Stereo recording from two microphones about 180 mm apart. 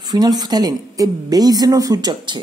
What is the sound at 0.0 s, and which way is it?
Speech, 20° right (ahead or behind).